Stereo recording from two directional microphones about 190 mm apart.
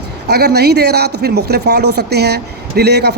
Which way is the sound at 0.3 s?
60° right (ahead or behind).